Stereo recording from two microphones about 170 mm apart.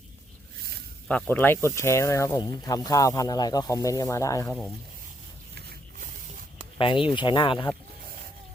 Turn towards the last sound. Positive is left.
turn(degrees=25)  # may be behind; listen again after turning